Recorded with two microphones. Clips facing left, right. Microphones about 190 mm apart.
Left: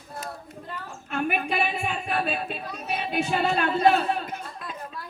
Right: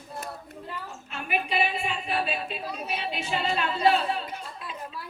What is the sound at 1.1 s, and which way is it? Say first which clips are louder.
Speech: left 4 dB; 55° left (ahead or behind).